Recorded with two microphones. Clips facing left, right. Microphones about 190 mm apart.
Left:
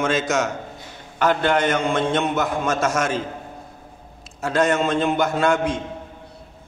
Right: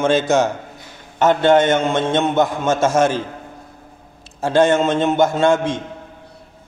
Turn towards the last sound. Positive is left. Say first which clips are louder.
# right 4 dB
turn(degrees=-25)  # may be behind; listen again after turning